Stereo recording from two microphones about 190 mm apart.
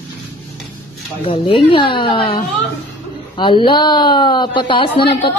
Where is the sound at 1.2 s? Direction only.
30° left (ahead or behind).